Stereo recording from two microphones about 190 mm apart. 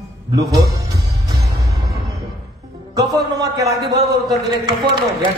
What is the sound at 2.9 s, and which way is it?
A man's voice, 20° right (ahead or behind).